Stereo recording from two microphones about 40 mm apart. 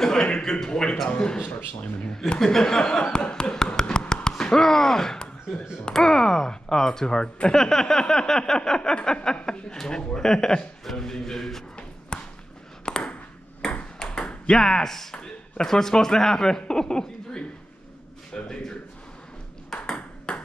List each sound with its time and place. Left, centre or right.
0.0 s a man's voice: centre
12.1 s basketball bounce: left
12.8 s a sound: left
13.6 s ping: centre
14.0 s ping: left
15.2 s a man's voice: centre
19.7 s ping: centre
20.3 s ping: left